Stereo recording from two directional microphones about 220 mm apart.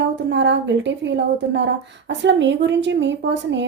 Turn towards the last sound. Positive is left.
turn(degrees=-55)  # may be behind; listen again after turning